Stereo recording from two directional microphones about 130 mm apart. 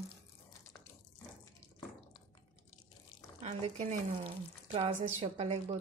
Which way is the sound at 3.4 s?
55° right (ahead or behind).